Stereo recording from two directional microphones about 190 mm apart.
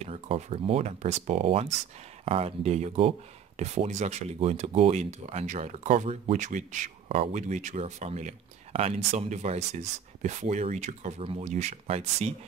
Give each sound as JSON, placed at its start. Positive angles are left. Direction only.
{"t": 0.0, "sound": "speech", "side_deg": -35}